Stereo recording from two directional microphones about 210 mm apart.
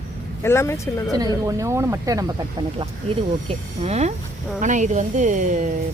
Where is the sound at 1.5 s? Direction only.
15° right (ahead or behind).